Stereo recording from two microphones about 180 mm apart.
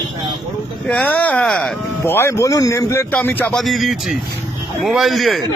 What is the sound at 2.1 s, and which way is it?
A man's voice, 15° left (ahead or behind).